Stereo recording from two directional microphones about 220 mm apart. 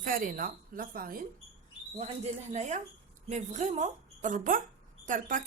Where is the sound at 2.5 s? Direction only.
30° right (ahead or behind).